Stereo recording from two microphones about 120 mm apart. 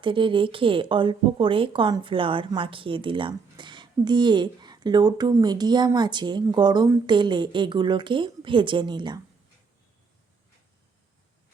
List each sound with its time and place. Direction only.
0.0 s a woman's voice: 45° right (ahead or behind)